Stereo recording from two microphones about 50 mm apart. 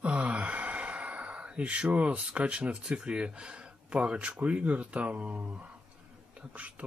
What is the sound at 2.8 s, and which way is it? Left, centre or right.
Speech, centre.